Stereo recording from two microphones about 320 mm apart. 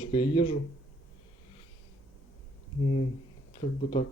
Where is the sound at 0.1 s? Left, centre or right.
Centre.